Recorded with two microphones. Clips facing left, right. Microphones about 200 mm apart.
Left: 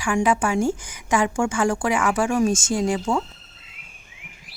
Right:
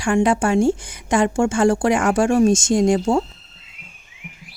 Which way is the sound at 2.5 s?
75° right (ahead or behind).